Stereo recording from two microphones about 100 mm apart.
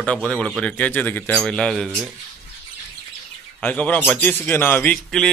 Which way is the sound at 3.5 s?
15° left (ahead or behind).